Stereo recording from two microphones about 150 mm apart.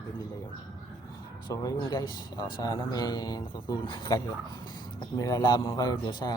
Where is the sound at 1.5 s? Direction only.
25° left (ahead or behind).